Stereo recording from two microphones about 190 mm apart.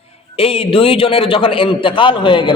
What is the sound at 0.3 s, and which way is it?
A man's voice, 30° left (ahead or behind).